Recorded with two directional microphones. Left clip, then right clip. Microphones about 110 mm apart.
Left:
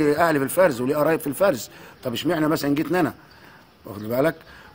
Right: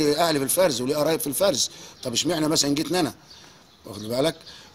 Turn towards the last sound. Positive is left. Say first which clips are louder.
# left 2 dB
turn(degrees=-5)  # may be behind; listen again after turning